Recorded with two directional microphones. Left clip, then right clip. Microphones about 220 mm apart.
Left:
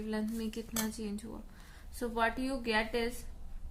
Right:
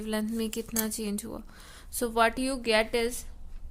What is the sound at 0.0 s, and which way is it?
Speech, 45° right (ahead or behind).